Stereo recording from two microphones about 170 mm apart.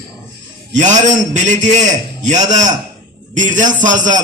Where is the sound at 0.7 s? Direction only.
45° right (ahead or behind).